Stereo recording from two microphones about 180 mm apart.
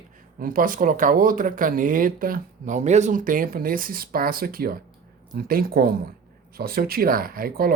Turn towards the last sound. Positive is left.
turn(degrees=-55)  # may be behind; listen again after turning